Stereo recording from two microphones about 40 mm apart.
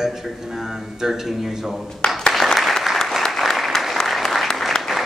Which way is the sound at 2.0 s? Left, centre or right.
Left.